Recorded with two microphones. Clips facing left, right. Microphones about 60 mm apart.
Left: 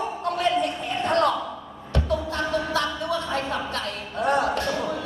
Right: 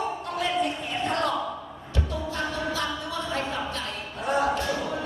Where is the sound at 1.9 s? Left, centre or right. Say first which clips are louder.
Left 5 dB; left.